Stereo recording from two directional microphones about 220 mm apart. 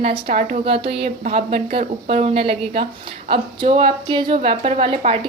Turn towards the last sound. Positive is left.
turn(degrees=-25)  # may be behind; listen again after turning